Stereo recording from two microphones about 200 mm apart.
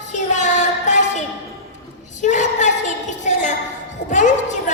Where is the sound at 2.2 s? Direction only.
35° left (ahead or behind).